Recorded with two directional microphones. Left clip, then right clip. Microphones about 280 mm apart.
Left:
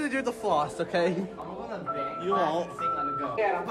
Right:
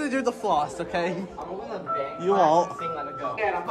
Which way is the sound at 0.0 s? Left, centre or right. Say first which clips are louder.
Right 3 dB; centre.